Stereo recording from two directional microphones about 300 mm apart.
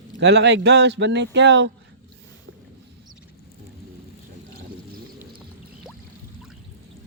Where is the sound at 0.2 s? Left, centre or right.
Right.